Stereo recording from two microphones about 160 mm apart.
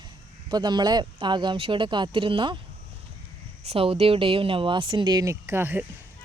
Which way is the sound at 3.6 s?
35° right (ahead or behind).